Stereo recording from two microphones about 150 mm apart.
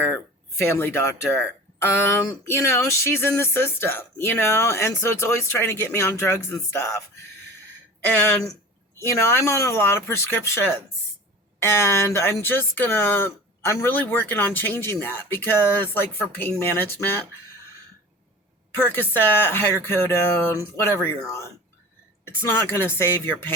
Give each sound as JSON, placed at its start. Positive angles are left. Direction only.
{"t": 0.6, "sound": "speech", "side_deg": 15}
{"t": 8.0, "sound": "speech", "side_deg": 10}
{"t": 9.0, "sound": "speech", "side_deg": 20}
{"t": 18.8, "sound": "speech", "side_deg": 15}